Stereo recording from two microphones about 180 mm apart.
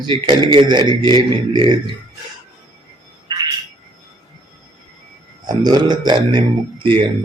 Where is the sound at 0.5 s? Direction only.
25° right (ahead or behind).